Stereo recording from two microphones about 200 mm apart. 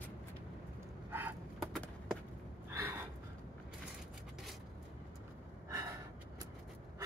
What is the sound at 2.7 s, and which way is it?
Gasp, 15° right (ahead or behind).